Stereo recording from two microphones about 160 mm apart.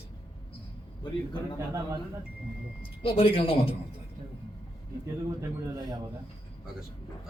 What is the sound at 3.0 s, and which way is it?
Speech, 35° left (ahead or behind).